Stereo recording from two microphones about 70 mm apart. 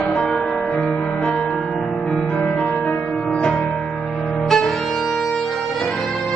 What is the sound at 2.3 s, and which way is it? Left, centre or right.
Music, centre.